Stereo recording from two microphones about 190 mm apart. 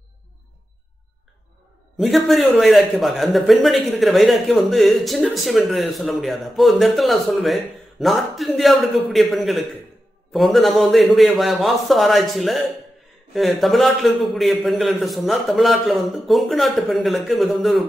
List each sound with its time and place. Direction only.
2.0 s speech: centre (ahead or behind)